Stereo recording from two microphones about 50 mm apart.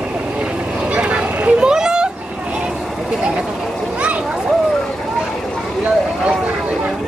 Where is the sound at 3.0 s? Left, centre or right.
Centre.